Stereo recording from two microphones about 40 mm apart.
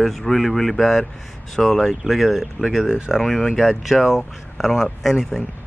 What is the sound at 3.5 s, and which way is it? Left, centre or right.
Speech, centre.